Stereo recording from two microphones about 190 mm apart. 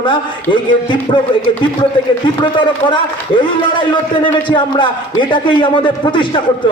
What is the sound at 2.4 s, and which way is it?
A man's voice, 25° left (ahead or behind).